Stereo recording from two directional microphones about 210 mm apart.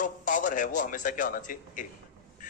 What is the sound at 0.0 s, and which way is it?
A man's voice, 40° left (ahead or behind).